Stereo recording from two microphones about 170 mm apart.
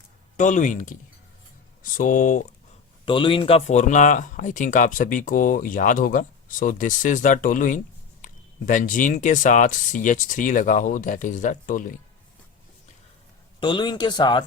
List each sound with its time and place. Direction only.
0.3 s speech: 45° left (ahead or behind)
3.1 s speech: 30° left (ahead or behind); by 11.9 s 50° left (ahead or behind)
13.6 s speech: 25° left (ahead or behind)